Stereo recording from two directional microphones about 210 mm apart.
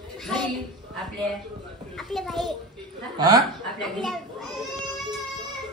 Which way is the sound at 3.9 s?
Centre (ahead or behind).